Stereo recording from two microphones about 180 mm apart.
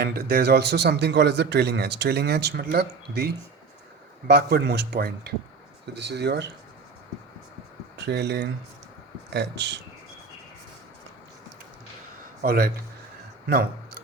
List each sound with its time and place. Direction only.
0.0 s a man's voice: 55° right (ahead or behind)
5.9 s speech: 70° right (ahead or behind)
7.9 s a man's voice: 70° right (ahead or behind)
12.4 s a man's voice: 55° right (ahead or behind)